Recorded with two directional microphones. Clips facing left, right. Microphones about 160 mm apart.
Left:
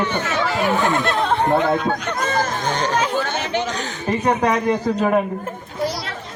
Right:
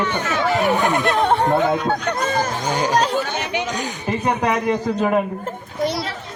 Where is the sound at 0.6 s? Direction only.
20° right (ahead or behind).